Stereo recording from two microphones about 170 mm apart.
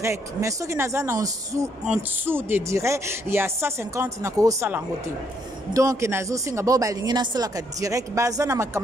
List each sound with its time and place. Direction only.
0.0 s speech: 15° right (ahead or behind)